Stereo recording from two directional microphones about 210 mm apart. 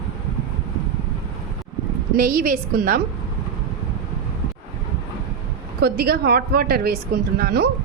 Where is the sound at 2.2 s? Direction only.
40° right (ahead or behind).